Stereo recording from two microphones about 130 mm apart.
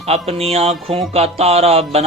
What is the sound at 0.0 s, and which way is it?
Speech, 50° right (ahead or behind).